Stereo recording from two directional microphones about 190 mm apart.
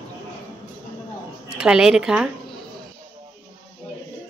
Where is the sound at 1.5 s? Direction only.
5° right (ahead or behind).